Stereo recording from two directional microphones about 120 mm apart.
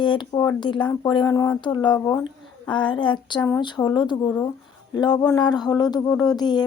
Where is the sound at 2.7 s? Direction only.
40° left (ahead or behind).